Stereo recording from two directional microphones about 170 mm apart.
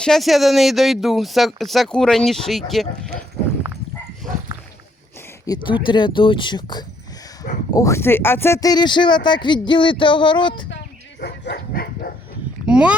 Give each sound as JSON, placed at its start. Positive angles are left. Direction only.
{"t": 0.0, "sound": "speech", "side_deg": 0}
{"t": 5.5, "sound": "speech", "side_deg": 30}
{"t": 11.2, "sound": "speech", "side_deg": 70}
{"t": 12.6, "sound": "speech", "side_deg": -5}